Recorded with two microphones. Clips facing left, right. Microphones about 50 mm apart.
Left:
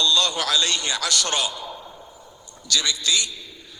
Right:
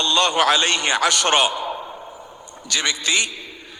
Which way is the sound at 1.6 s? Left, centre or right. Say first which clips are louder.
Right 8 dB; right.